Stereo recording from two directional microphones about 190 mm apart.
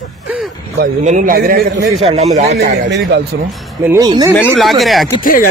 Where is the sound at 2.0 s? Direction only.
35° right (ahead or behind).